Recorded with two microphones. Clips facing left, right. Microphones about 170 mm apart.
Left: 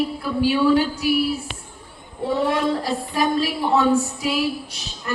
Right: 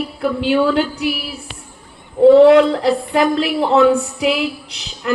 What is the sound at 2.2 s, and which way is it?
A woman's voice, 70° right (ahead or behind).